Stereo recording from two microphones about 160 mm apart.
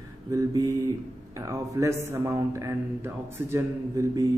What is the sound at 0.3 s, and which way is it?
Speech, 20° right (ahead or behind).